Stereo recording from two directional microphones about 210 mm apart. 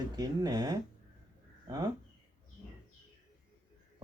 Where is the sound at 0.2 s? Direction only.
20° right (ahead or behind).